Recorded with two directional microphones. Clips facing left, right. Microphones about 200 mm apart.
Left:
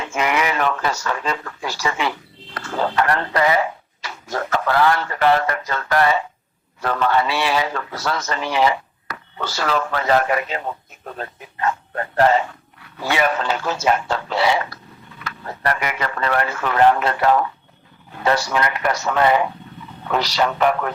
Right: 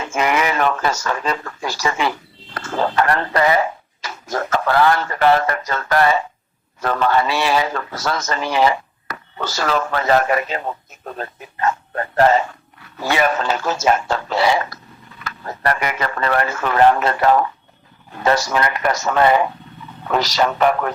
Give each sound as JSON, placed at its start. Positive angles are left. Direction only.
{"t": 0.0, "sound": "a man's voice", "side_deg": -40}